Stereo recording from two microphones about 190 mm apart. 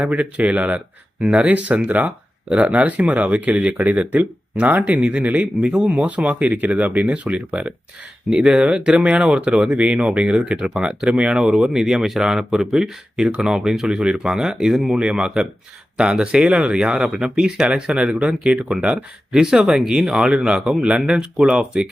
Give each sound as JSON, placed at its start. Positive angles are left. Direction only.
{"t": 0.0, "sound": "speech", "side_deg": -5}